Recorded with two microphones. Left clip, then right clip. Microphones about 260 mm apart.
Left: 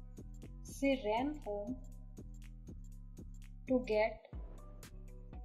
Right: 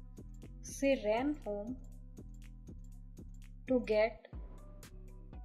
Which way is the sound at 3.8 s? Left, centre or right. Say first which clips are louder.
Right 3 dB; right.